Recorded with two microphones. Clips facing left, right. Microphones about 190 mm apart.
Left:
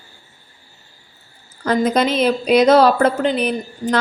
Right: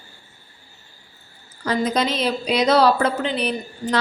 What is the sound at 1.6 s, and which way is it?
A woman's voice, 55° left (ahead or behind).